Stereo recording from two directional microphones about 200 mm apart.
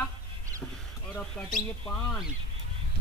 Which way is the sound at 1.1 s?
5° left (ahead or behind).